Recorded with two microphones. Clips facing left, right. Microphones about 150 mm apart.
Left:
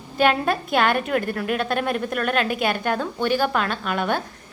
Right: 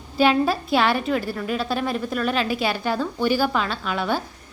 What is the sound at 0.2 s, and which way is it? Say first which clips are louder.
Speech: right 1 dB; 5° right (ahead or behind).